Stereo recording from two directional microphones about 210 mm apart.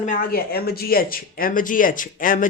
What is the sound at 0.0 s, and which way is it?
Speech, 40° left (ahead or behind).